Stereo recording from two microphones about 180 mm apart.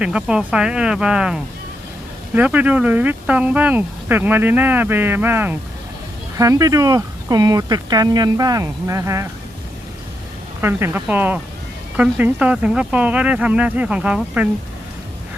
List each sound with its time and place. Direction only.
0.0 s speech: 5° right (ahead or behind)
10.6 s speech: 10° right (ahead or behind)